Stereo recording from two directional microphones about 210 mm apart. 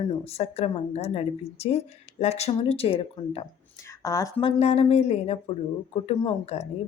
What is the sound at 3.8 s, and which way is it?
A woman's voice, 15° left (ahead or behind).